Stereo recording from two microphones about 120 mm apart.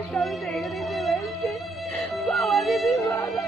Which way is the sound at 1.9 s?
Centre (ahead or behind).